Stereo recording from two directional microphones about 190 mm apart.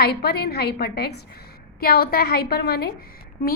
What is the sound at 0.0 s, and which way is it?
A woman's voice, 55° left (ahead or behind).